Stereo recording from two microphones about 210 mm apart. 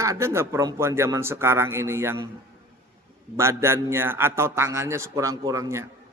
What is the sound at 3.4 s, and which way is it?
A man's voice, 10° right (ahead or behind).